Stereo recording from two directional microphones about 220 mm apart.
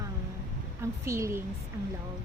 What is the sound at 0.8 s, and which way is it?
Speech, 15° right (ahead or behind).